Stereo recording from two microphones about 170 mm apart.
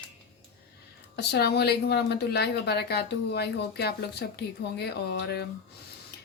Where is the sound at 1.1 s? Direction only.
70° left (ahead or behind).